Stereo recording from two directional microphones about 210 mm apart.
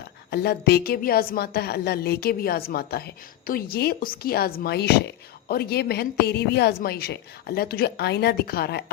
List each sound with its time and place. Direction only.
0.3 s a woman's voice: 50° left (ahead or behind)